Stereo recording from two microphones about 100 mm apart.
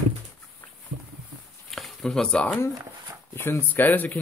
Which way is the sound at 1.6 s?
Centre (ahead or behind).